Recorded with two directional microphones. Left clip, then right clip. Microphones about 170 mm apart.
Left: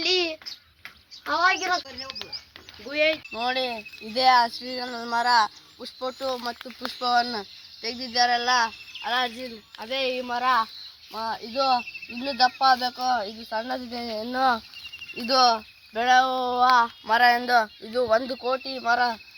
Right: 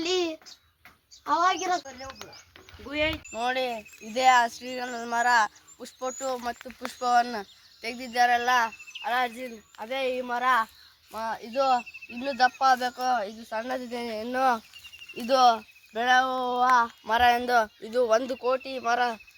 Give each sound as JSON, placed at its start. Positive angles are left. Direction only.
{"t": 0.0, "sound": "a sound", "side_deg": -45}
{"t": 3.3, "sound": "speech", "side_deg": -20}
{"t": 13.5, "sound": "speech", "side_deg": -25}
{"t": 15.1, "sound": "speech", "side_deg": -50}
{"t": 17.1, "sound": "speech", "side_deg": -55}
{"t": 18.0, "sound": "speech", "side_deg": -45}